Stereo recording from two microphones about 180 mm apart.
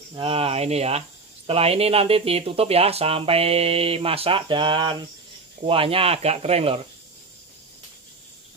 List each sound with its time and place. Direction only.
0.1 s speech: 30° right (ahead or behind)